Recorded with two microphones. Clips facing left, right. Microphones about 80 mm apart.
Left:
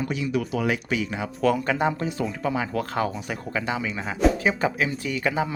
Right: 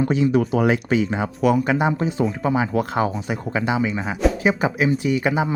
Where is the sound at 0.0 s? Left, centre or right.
Right.